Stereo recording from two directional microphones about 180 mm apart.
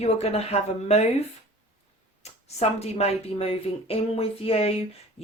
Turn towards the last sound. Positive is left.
turn(degrees=30)  # may be behind; listen again after turning